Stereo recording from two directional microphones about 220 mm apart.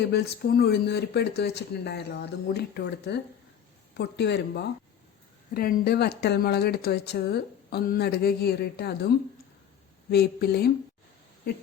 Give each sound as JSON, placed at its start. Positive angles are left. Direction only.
{"t": 0.1, "sound": "speech", "side_deg": 45}